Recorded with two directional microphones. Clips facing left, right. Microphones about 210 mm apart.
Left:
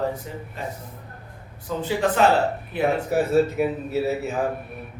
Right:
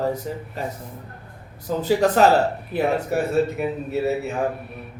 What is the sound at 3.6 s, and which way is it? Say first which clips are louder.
Speech: left 2 dB; 5° left (ahead or behind).